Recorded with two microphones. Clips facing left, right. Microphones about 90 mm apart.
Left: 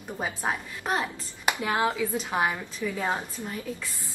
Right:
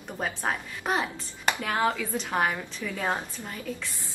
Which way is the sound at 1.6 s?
10° left (ahead or behind).